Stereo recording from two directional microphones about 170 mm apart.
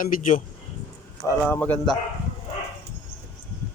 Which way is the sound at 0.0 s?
50° left (ahead or behind).